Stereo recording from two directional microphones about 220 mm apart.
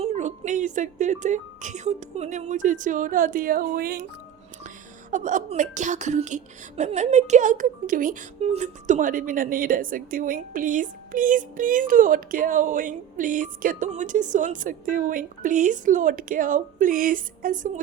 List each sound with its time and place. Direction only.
0.0 s a woman's voice: 30° right (ahead or behind)
5.1 s a woman's voice: 35° right (ahead or behind)